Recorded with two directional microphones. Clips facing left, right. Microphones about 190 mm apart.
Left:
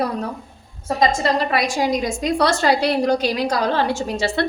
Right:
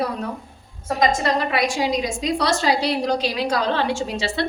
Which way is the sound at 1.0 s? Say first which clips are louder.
Left 1 dB; 35° left (ahead or behind).